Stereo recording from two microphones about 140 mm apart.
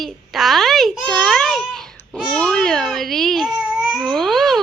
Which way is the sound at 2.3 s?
10° left (ahead or behind).